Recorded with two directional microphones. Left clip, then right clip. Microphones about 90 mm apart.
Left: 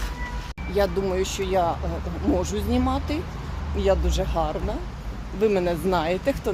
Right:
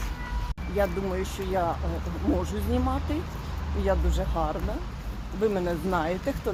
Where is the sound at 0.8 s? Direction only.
40° left (ahead or behind).